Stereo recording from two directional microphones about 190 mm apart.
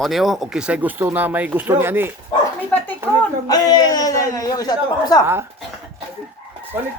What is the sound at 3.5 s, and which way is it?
A man's voice, 20° left (ahead or behind).